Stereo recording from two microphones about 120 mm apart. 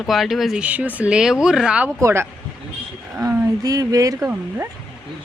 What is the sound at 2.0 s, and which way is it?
Speech, 20° right (ahead or behind).